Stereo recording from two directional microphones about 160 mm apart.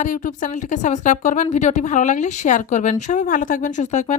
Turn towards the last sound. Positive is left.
turn(degrees=50)  # may be behind; listen again after turning